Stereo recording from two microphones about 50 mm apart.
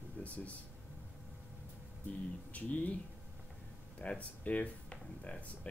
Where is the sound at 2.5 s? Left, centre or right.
Left.